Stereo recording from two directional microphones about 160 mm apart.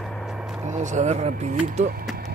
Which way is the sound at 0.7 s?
50° right (ahead or behind).